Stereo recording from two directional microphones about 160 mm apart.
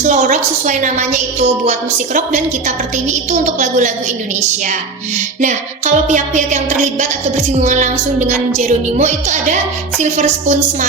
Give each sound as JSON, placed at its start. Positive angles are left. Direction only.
{"t": 0.0, "sound": "music", "side_deg": -50}
{"t": 5.4, "sound": "music", "side_deg": -50}